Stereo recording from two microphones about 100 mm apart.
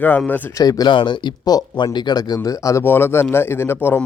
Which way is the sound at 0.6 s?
40° left (ahead or behind).